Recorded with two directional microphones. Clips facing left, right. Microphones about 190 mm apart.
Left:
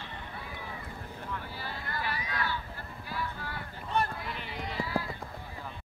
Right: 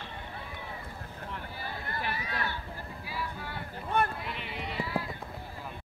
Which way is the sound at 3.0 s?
5° right (ahead or behind).